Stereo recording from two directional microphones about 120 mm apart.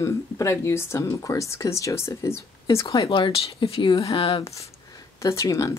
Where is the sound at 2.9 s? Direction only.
45° left (ahead or behind).